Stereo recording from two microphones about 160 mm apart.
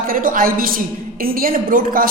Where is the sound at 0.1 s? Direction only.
60° right (ahead or behind).